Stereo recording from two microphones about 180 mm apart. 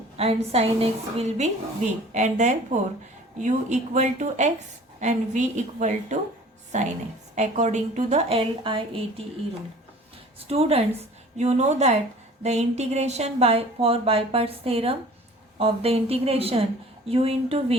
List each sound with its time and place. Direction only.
0.2 s a woman's voice: 35° right (ahead or behind)
10.5 s speech: 35° right (ahead or behind)